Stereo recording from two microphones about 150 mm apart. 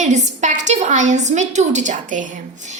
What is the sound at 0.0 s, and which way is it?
A woman's voice, 55° right (ahead or behind).